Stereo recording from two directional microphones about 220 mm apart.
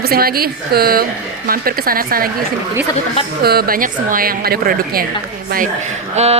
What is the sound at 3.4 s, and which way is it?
A woman's voice, 45° right (ahead or behind).